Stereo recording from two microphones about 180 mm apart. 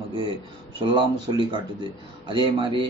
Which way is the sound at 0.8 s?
25° right (ahead or behind).